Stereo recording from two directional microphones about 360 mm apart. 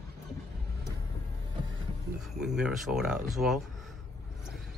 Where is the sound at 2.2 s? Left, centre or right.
Centre.